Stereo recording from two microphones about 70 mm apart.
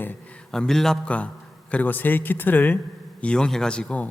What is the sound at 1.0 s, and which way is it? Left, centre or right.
A man's voice, centre.